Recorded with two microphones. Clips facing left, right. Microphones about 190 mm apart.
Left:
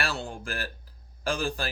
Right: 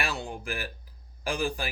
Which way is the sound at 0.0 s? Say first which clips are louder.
Left 1 dB; 15° right (ahead or behind).